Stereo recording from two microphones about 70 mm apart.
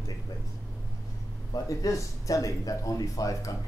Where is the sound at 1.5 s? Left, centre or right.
Left.